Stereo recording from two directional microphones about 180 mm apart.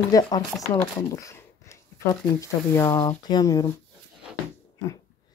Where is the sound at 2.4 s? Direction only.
15° left (ahead or behind).